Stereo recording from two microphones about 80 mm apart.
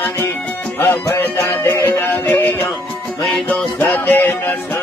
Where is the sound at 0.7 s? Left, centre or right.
Left.